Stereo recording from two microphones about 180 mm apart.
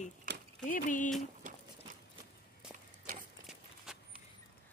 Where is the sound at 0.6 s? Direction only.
45° left (ahead or behind).